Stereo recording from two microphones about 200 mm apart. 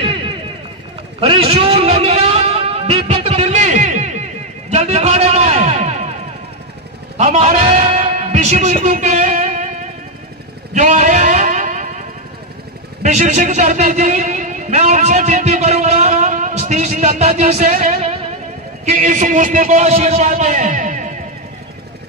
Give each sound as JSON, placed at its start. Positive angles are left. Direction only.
{"t": 1.2, "sound": "music", "side_deg": -30}
{"t": 7.2, "sound": "music", "side_deg": -40}
{"t": 10.7, "sound": "a sound", "side_deg": -40}
{"t": 13.0, "sound": "a man's voice", "side_deg": -35}